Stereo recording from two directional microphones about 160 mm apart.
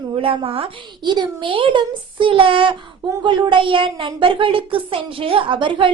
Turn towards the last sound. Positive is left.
turn(degrees=-30)  # may be behind; listen again after turning